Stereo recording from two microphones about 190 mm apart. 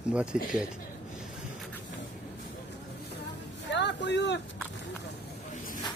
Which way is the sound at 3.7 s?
65° left (ahead or behind).